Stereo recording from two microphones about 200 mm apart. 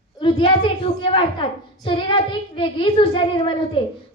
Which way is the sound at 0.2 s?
25° left (ahead or behind).